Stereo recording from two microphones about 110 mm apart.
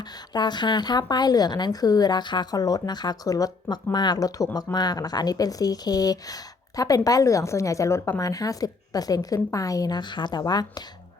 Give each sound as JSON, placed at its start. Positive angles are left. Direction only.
{"t": 0.0, "sound": "a woman's voice", "side_deg": 40}